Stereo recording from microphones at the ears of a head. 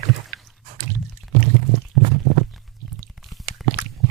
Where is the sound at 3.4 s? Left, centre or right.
Right.